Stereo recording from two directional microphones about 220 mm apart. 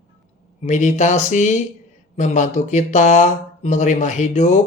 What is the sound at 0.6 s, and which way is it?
Speech, 35° left (ahead or behind).